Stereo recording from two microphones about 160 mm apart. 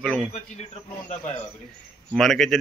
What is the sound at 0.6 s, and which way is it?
Speech, 45° left (ahead or behind).